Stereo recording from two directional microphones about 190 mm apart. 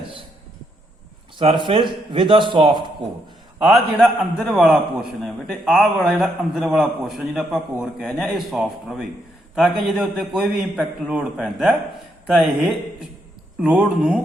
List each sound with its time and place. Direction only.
1.4 s speech: 30° right (ahead or behind)
3.6 s a man's voice: centre (ahead or behind)